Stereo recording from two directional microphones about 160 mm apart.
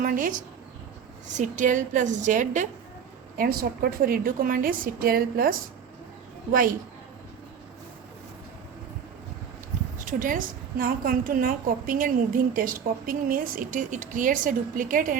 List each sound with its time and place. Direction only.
0.0 s a woman's voice: 55° right (ahead or behind)
3.3 s a woman's voice: 65° right (ahead or behind)
10.0 s a woman's voice: 55° right (ahead or behind)